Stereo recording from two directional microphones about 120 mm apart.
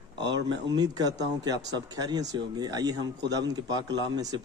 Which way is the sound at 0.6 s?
35° right (ahead or behind).